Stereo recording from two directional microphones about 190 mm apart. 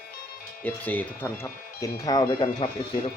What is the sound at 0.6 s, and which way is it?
Speech, 10° left (ahead or behind).